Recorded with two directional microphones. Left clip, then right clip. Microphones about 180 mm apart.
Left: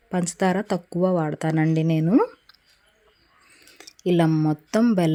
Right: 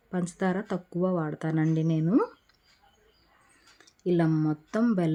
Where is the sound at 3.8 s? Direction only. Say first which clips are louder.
Left 5 dB; 20° left (ahead or behind).